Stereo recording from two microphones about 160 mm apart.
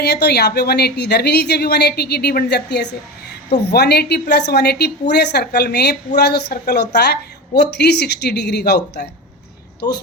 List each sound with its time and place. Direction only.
0.0 s a woman's voice: 90° left